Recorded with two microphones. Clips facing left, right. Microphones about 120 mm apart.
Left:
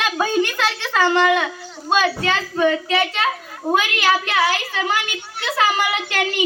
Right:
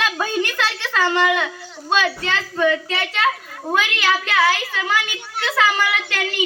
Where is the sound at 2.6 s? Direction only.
20° left (ahead or behind).